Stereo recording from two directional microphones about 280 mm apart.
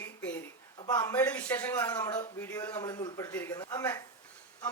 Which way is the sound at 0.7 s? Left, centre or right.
Centre.